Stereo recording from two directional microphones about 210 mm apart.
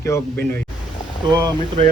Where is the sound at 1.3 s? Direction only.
20° right (ahead or behind).